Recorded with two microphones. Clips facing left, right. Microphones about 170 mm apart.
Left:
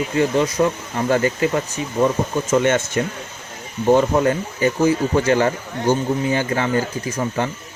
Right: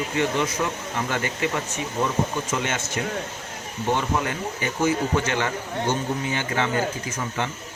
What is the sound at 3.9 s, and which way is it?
Speech, 40° left (ahead or behind).